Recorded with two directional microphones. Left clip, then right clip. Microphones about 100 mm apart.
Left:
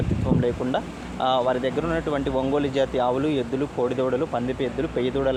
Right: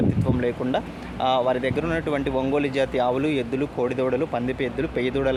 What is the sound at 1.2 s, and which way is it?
Speech, 35° right (ahead or behind).